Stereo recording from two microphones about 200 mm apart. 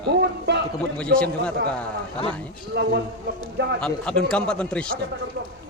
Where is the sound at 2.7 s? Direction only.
55° right (ahead or behind).